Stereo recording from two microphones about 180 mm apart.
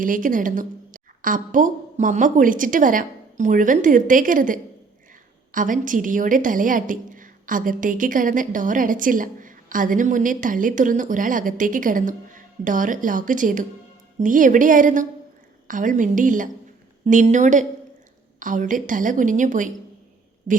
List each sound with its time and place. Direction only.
0.0 s a woman's voice: 50° right (ahead or behind)
20.5 s speech: 30° right (ahead or behind)